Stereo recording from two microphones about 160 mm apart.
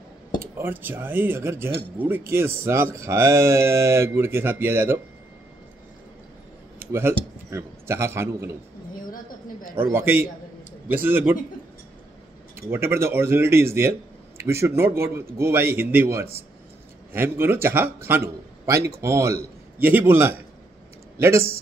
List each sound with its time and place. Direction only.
0.4 s a man's voice: 15° right (ahead or behind)
6.8 s a man's voice: 15° right (ahead or behind)
8.9 s a sound: 60° left (ahead or behind)
9.8 s a man's voice: 15° right (ahead or behind)
12.5 s a man's voice: 15° right (ahead or behind)